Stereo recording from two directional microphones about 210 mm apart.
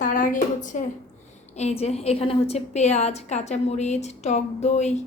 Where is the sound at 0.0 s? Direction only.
40° left (ahead or behind).